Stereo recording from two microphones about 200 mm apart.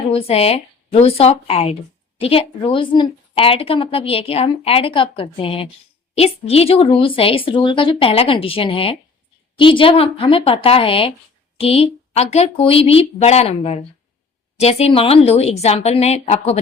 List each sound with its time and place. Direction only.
0.1 s a woman's voice: 30° left (ahead or behind)